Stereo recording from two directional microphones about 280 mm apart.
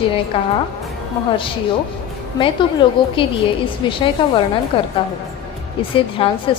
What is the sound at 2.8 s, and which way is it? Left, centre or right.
A woman's voice, centre.